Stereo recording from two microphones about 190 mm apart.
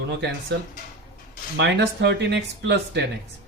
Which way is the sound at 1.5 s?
65° right (ahead or behind).